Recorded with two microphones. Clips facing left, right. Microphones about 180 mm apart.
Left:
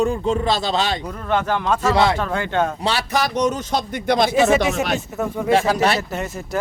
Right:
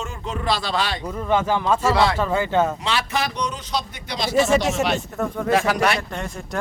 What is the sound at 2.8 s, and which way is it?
Speech, 35° left (ahead or behind).